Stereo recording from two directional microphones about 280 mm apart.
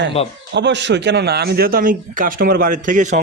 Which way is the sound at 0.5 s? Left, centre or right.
Right.